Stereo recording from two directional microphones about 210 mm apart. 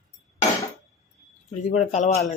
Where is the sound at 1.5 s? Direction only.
30° left (ahead or behind).